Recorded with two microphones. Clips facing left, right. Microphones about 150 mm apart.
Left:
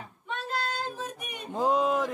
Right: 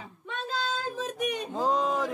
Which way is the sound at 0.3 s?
90° right.